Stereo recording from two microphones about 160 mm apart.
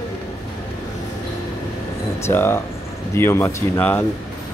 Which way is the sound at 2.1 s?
15° left (ahead or behind).